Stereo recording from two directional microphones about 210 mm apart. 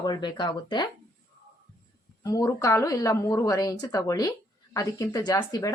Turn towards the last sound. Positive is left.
turn(degrees=15)  # may be behind; listen again after turning